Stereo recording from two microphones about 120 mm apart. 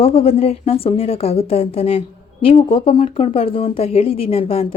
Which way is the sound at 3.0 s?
85° left.